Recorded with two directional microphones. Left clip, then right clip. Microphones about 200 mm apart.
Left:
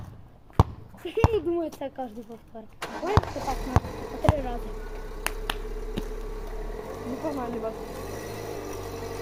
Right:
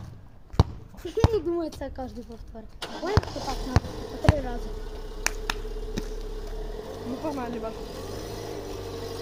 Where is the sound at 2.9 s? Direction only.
5° right (ahead or behind).